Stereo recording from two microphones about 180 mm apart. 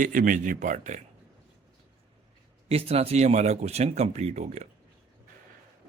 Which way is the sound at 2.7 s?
35° right (ahead or behind).